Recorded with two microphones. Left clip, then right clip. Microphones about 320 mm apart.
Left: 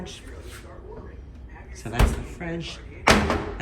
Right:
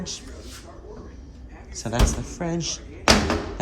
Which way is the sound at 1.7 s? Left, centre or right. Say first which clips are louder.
Right 2 dB; centre.